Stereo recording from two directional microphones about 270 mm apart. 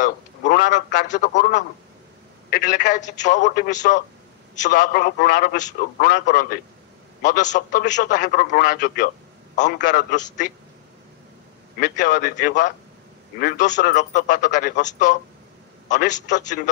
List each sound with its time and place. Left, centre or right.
0.0 s a sound: left
0.7 s a man's voice: left
11.8 s a man's voice: left